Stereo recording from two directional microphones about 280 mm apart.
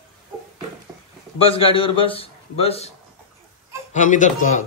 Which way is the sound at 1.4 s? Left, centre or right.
Centre.